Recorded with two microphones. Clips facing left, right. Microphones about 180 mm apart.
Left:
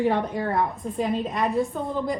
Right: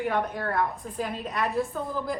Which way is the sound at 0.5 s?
Centre (ahead or behind).